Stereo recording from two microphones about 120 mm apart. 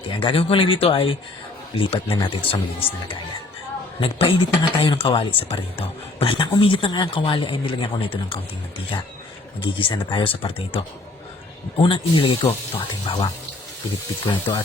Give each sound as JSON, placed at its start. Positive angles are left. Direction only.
{"t": 0.1, "sound": "speech", "side_deg": 45}
{"t": 4.0, "sound": "speech", "side_deg": 50}
{"t": 9.6, "sound": "speech", "side_deg": 45}
{"t": 14.3, "sound": "speech", "side_deg": 45}